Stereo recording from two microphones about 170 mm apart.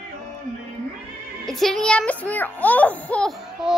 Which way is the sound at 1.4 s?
Centre (ahead or behind).